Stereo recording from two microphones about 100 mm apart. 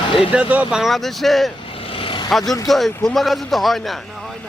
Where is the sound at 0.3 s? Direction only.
15° right (ahead or behind).